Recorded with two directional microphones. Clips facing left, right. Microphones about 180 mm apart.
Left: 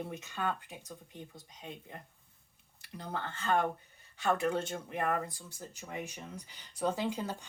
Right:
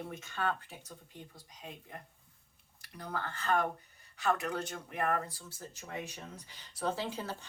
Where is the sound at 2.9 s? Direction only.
25° left (ahead or behind).